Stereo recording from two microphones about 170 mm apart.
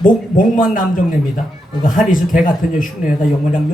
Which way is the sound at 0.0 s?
50° left (ahead or behind).